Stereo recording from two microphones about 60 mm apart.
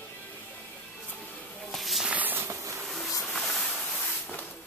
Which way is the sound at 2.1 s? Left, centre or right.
Right.